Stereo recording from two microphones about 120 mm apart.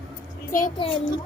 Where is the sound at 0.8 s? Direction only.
45° left (ahead or behind).